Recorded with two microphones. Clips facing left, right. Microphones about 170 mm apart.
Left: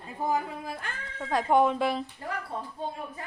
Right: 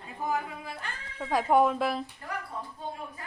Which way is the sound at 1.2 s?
5° right (ahead or behind).